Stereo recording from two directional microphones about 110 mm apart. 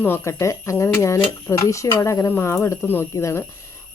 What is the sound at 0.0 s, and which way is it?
Speech, 20° left (ahead or behind).